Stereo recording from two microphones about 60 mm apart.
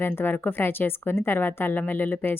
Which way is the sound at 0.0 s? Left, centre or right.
Left.